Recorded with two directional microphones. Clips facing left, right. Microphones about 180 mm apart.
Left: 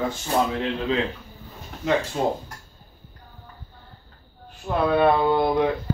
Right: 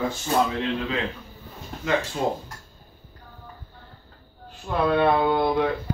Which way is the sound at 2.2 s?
30° left (ahead or behind).